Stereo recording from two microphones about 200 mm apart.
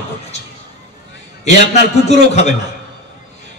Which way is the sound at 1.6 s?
35° left (ahead or behind).